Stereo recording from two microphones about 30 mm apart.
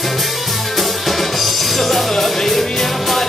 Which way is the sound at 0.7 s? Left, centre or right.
Centre.